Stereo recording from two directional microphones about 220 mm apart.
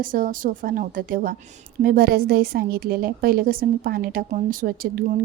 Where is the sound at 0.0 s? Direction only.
40° right (ahead or behind).